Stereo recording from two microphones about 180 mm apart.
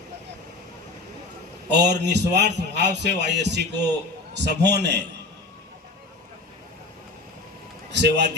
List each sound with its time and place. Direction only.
1.7 s speech: 70° right (ahead or behind)
7.9 s a man's voice: 75° right (ahead or behind)